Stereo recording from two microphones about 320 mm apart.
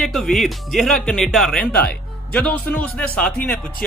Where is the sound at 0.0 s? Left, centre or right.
Centre.